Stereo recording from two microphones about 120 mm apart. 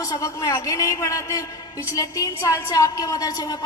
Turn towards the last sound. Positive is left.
turn(degrees=35)  # may be behind; listen again after turning